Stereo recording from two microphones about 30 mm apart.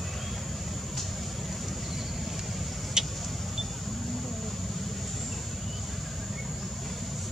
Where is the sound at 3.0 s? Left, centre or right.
Right.